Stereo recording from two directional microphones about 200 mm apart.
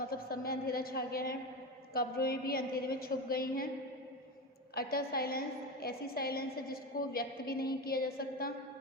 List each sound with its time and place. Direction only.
0.1 s a woman's voice: 50° left (ahead or behind)
4.7 s a woman's voice: 50° left (ahead or behind)